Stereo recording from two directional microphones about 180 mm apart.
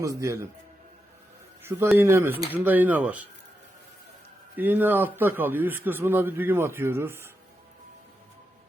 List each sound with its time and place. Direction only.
0.0 s a man's voice: 15° right (ahead or behind)
2.0 s a man's voice: 15° right (ahead or behind)
4.5 s a man's voice: 10° right (ahead or behind)